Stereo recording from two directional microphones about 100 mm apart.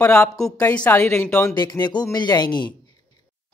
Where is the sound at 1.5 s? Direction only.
45° left (ahead or behind).